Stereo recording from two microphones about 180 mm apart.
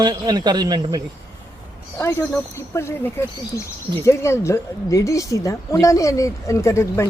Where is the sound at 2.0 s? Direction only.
15° left (ahead or behind).